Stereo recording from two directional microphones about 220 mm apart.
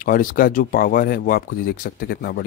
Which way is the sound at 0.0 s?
40° left (ahead or behind).